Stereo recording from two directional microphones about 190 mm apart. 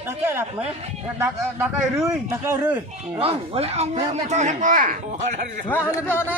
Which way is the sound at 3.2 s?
30° right (ahead or behind).